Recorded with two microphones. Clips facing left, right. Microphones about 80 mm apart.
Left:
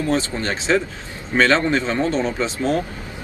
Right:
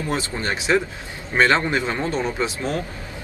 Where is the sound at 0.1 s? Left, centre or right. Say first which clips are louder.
Left 1 dB; centre.